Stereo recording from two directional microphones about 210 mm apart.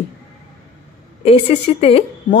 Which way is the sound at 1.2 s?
30° left (ahead or behind).